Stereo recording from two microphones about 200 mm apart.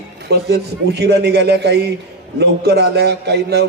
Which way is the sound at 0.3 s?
55° right (ahead or behind).